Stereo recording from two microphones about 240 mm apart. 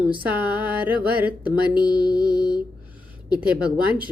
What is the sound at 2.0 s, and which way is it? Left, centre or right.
Music, right.